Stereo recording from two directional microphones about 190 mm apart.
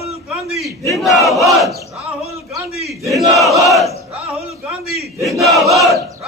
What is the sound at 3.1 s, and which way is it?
Crowd, centre (ahead or behind).